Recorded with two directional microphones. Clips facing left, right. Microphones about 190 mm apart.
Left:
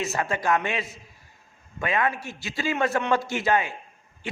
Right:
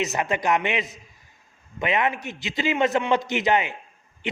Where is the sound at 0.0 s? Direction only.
20° right (ahead or behind).